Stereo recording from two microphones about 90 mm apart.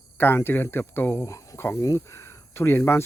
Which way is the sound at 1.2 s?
35° left (ahead or behind).